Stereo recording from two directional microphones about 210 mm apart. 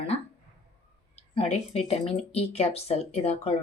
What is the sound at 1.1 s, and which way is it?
Speech, 30° left (ahead or behind).